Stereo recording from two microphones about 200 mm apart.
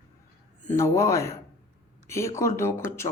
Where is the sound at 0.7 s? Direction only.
15° left (ahead or behind).